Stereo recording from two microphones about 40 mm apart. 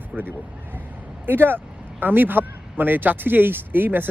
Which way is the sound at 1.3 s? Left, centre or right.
Right.